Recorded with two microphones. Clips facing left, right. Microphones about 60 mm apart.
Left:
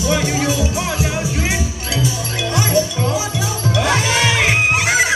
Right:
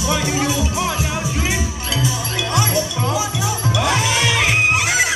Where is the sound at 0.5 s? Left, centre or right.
Right.